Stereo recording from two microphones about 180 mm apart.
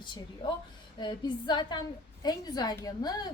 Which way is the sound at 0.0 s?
25° left (ahead or behind).